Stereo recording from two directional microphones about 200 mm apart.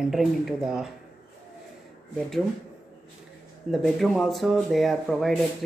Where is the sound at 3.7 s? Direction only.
Centre (ahead or behind).